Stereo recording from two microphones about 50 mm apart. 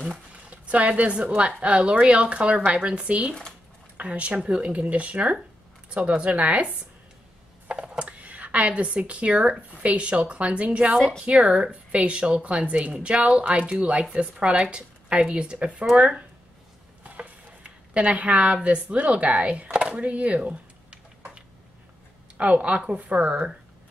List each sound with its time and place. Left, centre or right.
0.3 s speech: right
17.0 s speech: right
22.4 s speech: right